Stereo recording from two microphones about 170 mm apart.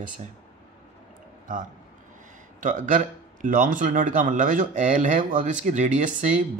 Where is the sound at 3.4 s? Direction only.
50° right (ahead or behind).